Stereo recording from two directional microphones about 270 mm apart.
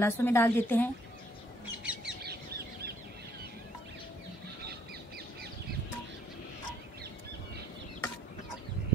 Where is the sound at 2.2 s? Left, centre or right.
Right.